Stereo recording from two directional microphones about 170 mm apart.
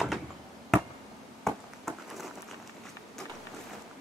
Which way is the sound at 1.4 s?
Centre (ahead or behind).